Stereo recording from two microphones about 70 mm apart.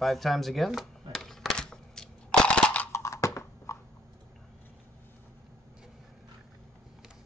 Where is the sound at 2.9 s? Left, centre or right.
Left.